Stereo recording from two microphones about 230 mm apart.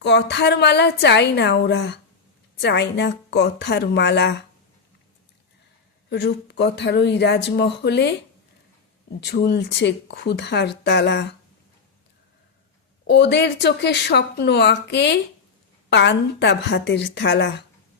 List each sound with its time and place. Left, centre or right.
0.0 s speech: left
6.1 s speech: left
9.2 s speech: left
13.1 s speech: left